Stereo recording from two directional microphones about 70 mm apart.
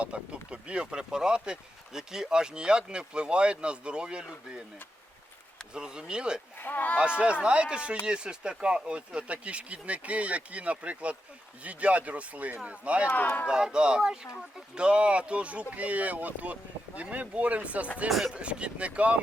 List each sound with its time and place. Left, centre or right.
0.0 s speech: centre
5.7 s speech: centre
6.6 s speech: left
7.0 s speech: centre
13.1 s speech: left
13.5 s speech: centre
18.1 s speech: centre
18.3 s speech: centre